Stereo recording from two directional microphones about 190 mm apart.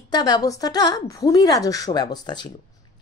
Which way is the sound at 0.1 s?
20° left (ahead or behind).